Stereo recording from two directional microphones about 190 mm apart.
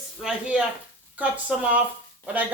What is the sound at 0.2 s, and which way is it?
A woman's voice, 5° right (ahead or behind).